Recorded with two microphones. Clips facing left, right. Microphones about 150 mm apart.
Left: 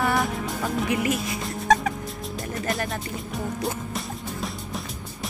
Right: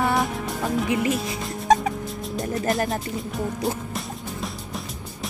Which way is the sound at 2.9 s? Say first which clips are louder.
Right 4 dB; centre (ahead or behind).